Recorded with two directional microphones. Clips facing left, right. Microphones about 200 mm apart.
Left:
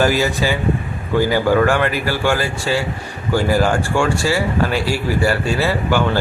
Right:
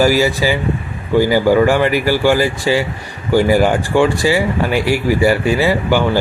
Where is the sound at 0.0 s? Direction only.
10° right (ahead or behind).